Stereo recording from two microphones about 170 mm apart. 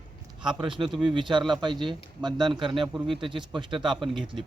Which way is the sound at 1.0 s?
30° right (ahead or behind).